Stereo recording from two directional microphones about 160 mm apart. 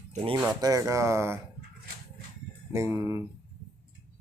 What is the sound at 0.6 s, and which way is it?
Speech, 20° right (ahead or behind).